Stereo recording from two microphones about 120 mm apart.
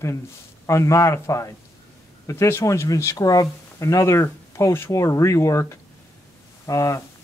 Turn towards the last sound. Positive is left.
turn(degrees=30)  # may be behind; listen again after turning